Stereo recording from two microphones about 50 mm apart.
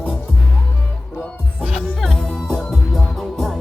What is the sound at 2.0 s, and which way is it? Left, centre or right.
Music, centre.